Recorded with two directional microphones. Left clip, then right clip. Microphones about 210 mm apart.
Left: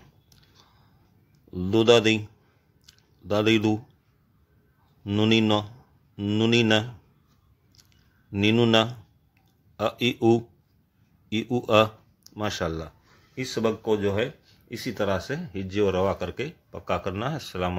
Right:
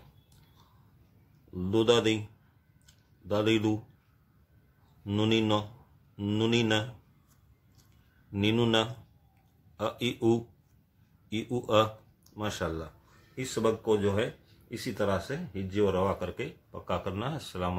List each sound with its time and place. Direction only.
1.5 s speech: 40° left (ahead or behind)
2.9 s a sound: 40° left (ahead or behind)
5.0 s speech: 40° left (ahead or behind)
8.3 s speech: 40° left (ahead or behind)